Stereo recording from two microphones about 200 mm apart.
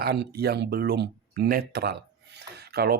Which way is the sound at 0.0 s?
50° right (ahead or behind).